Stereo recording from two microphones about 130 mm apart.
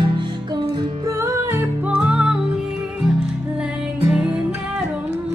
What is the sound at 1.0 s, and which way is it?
Music, 20° right (ahead or behind).